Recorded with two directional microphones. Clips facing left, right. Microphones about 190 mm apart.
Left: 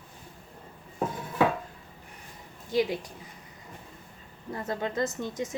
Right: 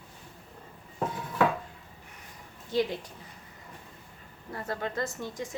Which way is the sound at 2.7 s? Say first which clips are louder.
Left 2 dB; 10° left (ahead or behind).